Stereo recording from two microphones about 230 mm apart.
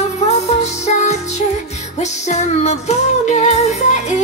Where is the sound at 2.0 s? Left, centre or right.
Left.